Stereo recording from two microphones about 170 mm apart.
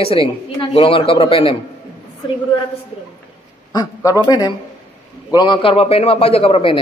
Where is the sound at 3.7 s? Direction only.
20° left (ahead or behind).